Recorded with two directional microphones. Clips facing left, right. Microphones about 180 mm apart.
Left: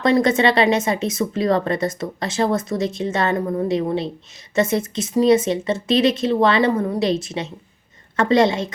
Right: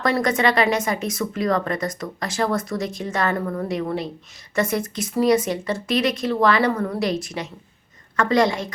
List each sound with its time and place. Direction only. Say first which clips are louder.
0.0 s speech: left 4 dB; 25° left (ahead or behind)